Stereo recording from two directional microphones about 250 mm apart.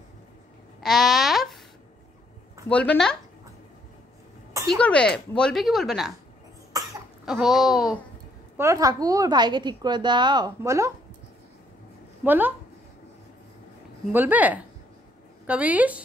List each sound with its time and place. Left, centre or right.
0.8 s a sound: centre
2.7 s speech: centre
4.6 s speech: centre
6.7 s cough: centre
7.2 s speech: centre
8.5 s a woman's voice: centre
12.3 s a woman's voice: centre
14.1 s a woman's voice: centre